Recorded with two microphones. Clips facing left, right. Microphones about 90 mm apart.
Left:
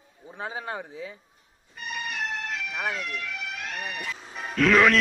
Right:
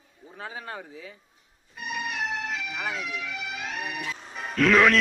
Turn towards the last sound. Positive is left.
turn(degrees=0)  # may be behind; listen again after turning